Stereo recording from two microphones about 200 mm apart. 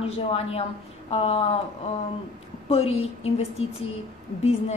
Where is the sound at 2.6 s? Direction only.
30° left (ahead or behind).